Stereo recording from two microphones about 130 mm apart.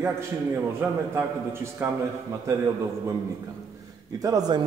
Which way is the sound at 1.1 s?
20° right (ahead or behind).